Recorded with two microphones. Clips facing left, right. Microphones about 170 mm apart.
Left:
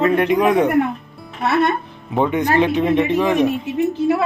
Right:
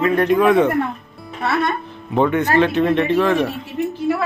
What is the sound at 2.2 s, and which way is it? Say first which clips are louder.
Speech: right 1 dB; 15° left (ahead or behind).